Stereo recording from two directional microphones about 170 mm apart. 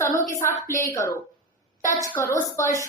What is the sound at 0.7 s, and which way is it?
A woman's voice, 15° left (ahead or behind).